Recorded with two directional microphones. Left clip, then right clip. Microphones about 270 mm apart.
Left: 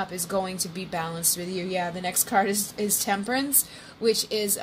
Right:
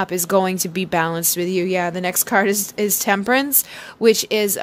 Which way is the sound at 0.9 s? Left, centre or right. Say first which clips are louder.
Right 11 dB; right.